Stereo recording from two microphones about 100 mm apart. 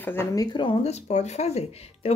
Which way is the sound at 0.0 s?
20° left (ahead or behind).